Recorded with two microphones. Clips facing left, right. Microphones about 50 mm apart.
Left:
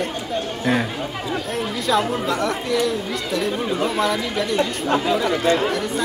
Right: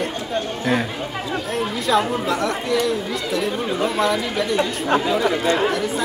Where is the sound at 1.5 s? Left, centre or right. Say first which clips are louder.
Right 2 dB; centre.